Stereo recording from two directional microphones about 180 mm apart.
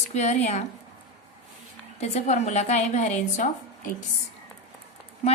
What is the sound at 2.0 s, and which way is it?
A woman's voice, 40° left (ahead or behind).